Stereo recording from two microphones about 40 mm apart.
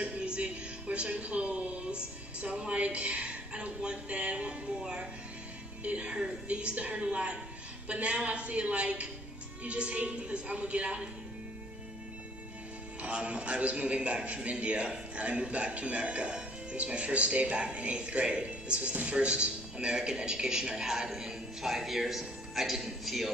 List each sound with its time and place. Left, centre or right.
0.0 s a woman's voice: right
13.0 s a man's voice: right; by 23.3 s centre